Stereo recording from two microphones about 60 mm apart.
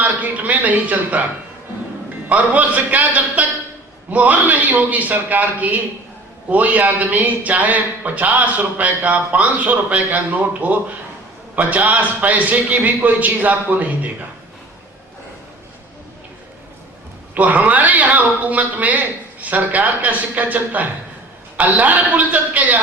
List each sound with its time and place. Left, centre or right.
0.0 s speech: right
2.3 s speech: right
17.3 s speech: right